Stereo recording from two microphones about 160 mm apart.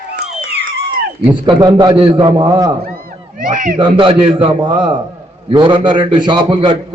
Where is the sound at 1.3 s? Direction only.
25° right (ahead or behind).